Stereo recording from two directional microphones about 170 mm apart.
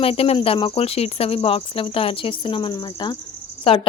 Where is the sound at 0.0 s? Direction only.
35° left (ahead or behind).